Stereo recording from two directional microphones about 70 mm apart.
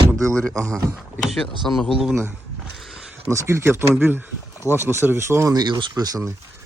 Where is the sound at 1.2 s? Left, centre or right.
Centre.